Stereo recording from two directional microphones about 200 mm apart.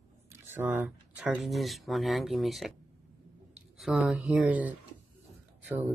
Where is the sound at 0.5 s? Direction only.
10° right (ahead or behind).